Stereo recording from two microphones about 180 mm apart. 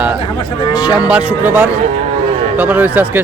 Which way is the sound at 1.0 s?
5° right (ahead or behind).